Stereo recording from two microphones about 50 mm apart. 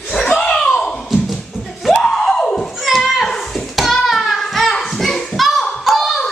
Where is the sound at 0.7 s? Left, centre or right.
Centre.